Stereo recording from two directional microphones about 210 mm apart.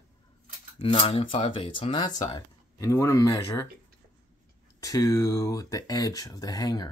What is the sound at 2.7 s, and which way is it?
Speech, 15° left (ahead or behind).